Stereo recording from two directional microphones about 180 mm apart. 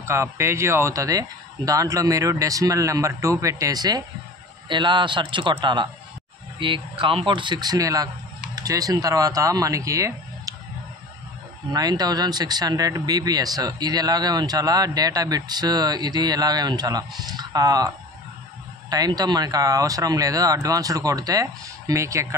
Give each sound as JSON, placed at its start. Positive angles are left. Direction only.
{"t": 0.0, "sound": "speech", "side_deg": -15}
{"t": 11.7, "sound": "speech", "side_deg": -20}